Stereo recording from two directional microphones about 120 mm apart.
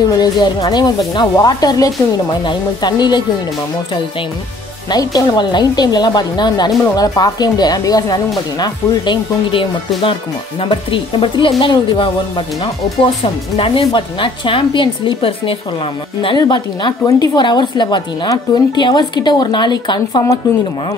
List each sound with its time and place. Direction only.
0.1 s a woman's voice: 35° left (ahead or behind)
4.8 s a woman's voice: 35° left (ahead or behind)
16.3 s a woman's voice: 35° left (ahead or behind)